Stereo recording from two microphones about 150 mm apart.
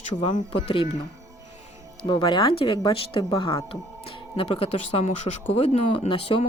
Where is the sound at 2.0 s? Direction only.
30° left (ahead or behind).